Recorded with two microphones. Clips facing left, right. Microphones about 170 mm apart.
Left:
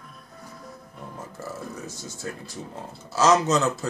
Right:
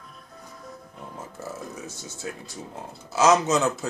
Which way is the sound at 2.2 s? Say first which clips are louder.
Even; 10° right (ahead or behind).